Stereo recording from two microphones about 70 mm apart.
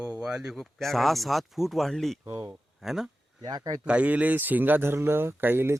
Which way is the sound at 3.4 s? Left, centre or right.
Right.